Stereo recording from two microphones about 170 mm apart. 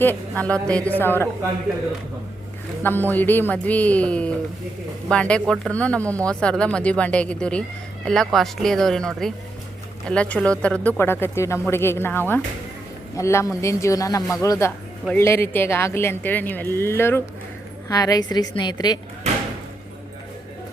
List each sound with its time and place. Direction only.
0.0 s a woman's voice: 10° left (ahead or behind)
2.8 s a woman's voice: 10° left (ahead or behind)